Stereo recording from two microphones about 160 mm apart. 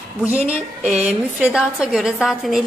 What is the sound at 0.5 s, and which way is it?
A woman's voice, 5° right (ahead or behind).